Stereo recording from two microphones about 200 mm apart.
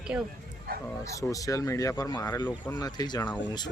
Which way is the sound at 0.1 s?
5° right (ahead or behind).